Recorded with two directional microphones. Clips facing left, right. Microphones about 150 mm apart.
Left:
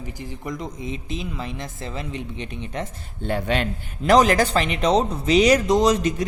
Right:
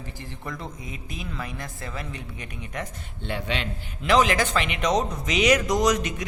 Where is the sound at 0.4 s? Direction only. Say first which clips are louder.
Left 6 dB; 15° left (ahead or behind).